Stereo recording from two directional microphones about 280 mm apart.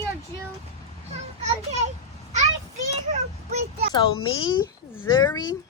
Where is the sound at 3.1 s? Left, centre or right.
Right.